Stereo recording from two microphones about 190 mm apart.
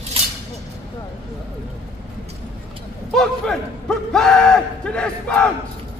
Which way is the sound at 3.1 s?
5° left (ahead or behind).